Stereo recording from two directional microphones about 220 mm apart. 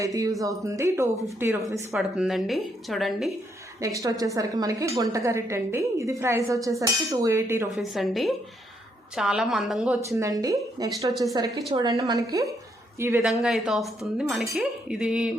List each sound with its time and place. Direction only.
0.0 s a woman's voice: 15° right (ahead or behind)
1.9 s a woman's voice: centre (ahead or behind)
3.8 s a woman's voice: 15° right (ahead or behind)
7.7 s a woman's voice: centre (ahead or behind); by 10.9 s 15° right (ahead or behind)
11.1 s a woman's voice: centre (ahead or behind)
11.7 s a woman's voice: 20° right (ahead or behind); by 15.3 s 5° right (ahead or behind)